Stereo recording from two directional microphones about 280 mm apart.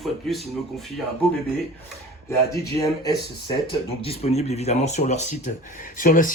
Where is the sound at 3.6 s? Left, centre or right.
Centre.